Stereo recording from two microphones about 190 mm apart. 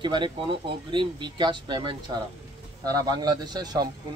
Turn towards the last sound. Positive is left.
turn(degrees=-20)  # may be behind; listen again after turning